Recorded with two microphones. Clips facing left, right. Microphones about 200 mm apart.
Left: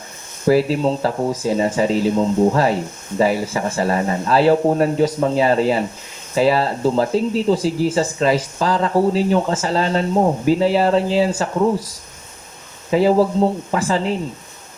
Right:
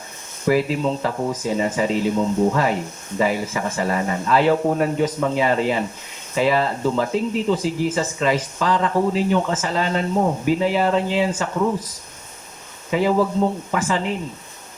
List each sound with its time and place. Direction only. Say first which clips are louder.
0.4 s speech: left 4 dB; 35° left (ahead or behind)
12.9 s speech: left 4 dB; 35° left (ahead or behind)